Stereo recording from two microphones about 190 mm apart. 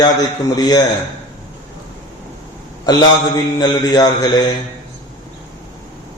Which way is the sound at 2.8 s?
20° left (ahead or behind).